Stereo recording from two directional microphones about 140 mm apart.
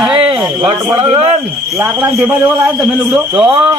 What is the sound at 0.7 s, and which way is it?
Speech, 40° right (ahead or behind).